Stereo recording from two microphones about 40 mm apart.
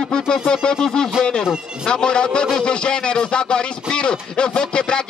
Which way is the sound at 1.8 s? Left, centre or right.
Left.